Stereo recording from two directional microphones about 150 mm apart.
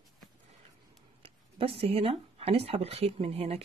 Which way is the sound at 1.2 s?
40° right (ahead or behind).